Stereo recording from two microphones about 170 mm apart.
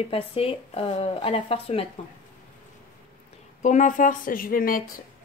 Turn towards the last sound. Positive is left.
turn(degrees=55)  # may be behind; listen again after turning